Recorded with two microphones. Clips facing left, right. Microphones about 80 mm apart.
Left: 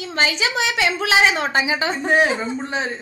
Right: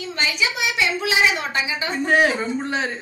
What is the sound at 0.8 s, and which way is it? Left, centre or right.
A child's voice, left.